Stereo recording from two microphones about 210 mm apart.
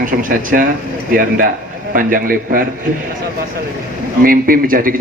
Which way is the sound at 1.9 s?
40° right (ahead or behind).